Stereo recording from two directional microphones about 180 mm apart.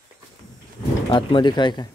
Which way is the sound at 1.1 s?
25° left (ahead or behind).